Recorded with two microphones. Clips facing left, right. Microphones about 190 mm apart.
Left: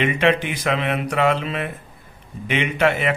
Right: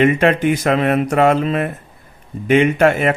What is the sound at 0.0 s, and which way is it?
Speech, 45° right (ahead or behind).